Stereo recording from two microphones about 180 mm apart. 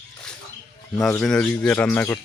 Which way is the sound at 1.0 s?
Centre (ahead or behind).